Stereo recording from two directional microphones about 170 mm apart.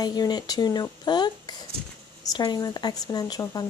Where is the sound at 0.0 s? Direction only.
25° left (ahead or behind).